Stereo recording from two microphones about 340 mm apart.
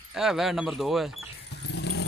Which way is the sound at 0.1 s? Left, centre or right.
Centre.